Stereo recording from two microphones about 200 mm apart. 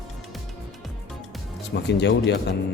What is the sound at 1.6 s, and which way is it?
Speech, 60° left (ahead or behind).